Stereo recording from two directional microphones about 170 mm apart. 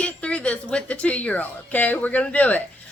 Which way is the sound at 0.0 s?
5° left (ahead or behind).